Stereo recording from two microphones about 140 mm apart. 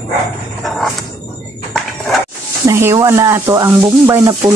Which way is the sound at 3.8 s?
20° right (ahead or behind).